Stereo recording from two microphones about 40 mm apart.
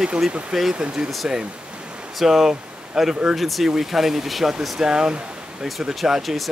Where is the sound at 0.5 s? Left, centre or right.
Centre.